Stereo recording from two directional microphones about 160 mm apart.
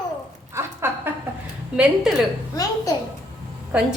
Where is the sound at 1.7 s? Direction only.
5° right (ahead or behind).